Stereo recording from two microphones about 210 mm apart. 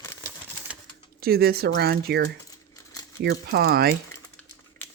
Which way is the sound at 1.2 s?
45° right (ahead or behind).